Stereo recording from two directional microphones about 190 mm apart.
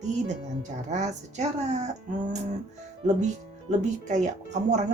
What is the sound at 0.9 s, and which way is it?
Speech, 40° right (ahead or behind).